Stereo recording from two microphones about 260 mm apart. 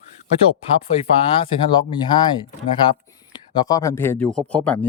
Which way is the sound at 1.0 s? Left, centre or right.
Left.